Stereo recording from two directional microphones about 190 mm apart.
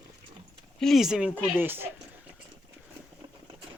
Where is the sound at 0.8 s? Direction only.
Centre (ahead or behind).